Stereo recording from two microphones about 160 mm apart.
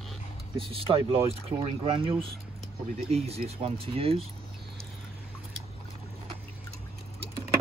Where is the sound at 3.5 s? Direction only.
35° right (ahead or behind).